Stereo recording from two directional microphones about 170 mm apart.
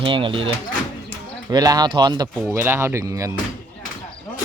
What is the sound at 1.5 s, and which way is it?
Speech, 25° right (ahead or behind).